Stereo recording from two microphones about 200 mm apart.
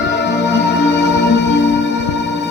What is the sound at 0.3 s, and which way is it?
Music, 60° left (ahead or behind).